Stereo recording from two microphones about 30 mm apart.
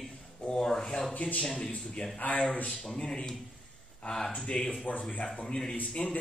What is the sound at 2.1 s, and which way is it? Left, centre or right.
Speech, left.